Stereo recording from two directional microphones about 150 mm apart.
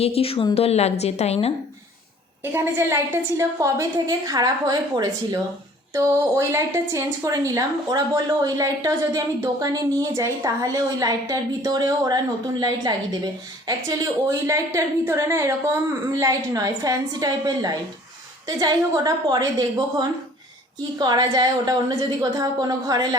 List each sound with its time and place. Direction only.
0.0 s a woman's voice: 40° left (ahead or behind)
2.4 s a woman's voice: 15° right (ahead or behind)